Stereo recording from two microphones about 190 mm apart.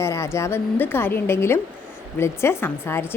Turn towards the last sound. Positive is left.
turn(degrees=10)  # may be behind; listen again after turning